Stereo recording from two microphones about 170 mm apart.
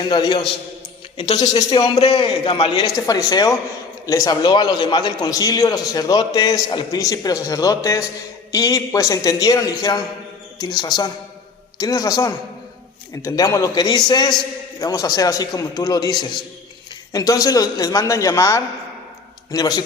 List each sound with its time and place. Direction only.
0.0 s a man's voice: 25° left (ahead or behind)
1.5 s a man's voice: 20° left (ahead or behind)
2.0 s a man's voice: 35° left (ahead or behind)